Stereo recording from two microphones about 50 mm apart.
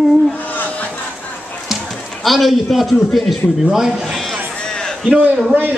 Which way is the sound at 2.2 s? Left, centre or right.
Centre.